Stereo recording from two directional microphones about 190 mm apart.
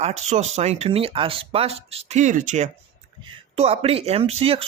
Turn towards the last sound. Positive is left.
turn(degrees=-30)  # may be behind; listen again after turning